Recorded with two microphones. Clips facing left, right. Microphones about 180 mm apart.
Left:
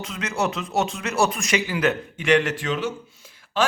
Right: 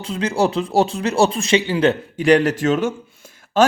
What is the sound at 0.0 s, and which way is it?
A man's voice, 30° right (ahead or behind).